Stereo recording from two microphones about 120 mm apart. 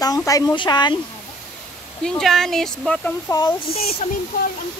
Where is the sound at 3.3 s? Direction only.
30° left (ahead or behind).